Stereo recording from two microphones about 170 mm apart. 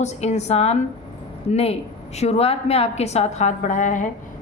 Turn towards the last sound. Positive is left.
turn(degrees=50)  # may be behind; listen again after turning